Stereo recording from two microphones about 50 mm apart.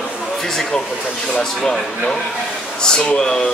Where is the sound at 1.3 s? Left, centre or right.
Centre.